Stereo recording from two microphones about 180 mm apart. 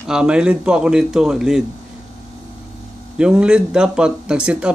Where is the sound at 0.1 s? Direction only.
5° right (ahead or behind).